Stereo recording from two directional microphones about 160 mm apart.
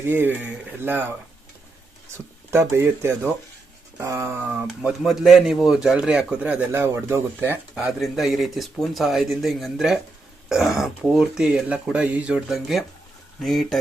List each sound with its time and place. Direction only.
0.0 s speech: 15° right (ahead or behind)
2.5 s speech: 15° right (ahead or behind)
4.5 s speech: 5° right (ahead or behind)